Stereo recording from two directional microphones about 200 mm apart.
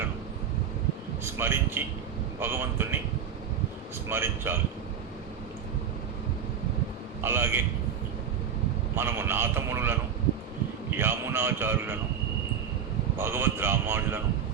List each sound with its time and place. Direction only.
1.2 s a man's voice: 10° right (ahead or behind)
4.1 s a man's voice: 10° right (ahead or behind)
7.2 s a man's voice: 10° right (ahead or behind)
9.0 s a man's voice: 10° right (ahead or behind)
13.1 s a man's voice: 10° right (ahead or behind)